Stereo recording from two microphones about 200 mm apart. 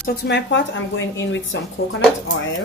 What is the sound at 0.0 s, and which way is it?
Speech, 50° left (ahead or behind).